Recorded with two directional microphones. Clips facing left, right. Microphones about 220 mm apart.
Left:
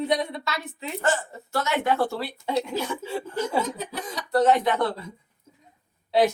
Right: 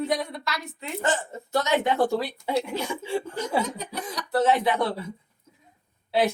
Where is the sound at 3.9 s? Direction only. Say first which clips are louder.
Left 2 dB; 5° right (ahead or behind).